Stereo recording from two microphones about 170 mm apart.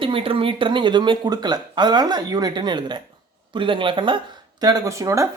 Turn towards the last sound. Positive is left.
turn(degrees=-20)  # may be behind; listen again after turning